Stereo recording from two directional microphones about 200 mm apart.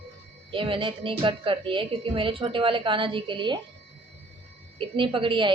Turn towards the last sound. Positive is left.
turn(degrees=-25)  # may be behind; listen again after turning